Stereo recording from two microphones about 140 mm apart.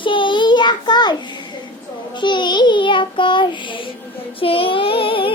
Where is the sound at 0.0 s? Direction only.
35° left (ahead or behind).